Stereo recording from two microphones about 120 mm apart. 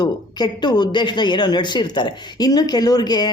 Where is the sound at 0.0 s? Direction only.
35° left (ahead or behind).